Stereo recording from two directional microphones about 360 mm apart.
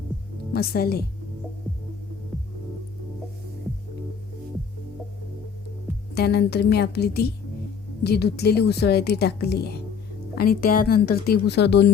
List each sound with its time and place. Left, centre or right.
0.5 s a woman's voice: left
6.1 s a woman's voice: left